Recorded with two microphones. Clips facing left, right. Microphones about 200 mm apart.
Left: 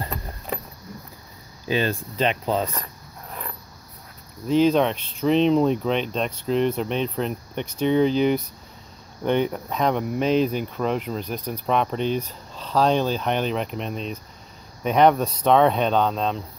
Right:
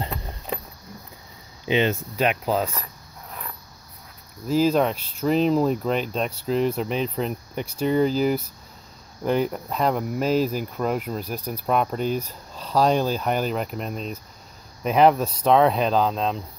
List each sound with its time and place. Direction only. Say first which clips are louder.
0.0 s keys jangling: even; 15° right (ahead or behind)
1.7 s speech: right 2 dB; 20° right (ahead or behind)
2.1 s speech: even; 5° right (ahead or behind)
4.5 s speech: left 2 dB; 5° right (ahead or behind)